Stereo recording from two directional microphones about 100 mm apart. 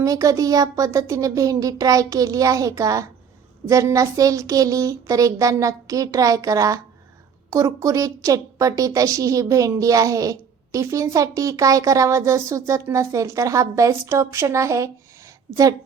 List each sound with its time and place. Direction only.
0.0 s a woman's voice: 35° right (ahead or behind)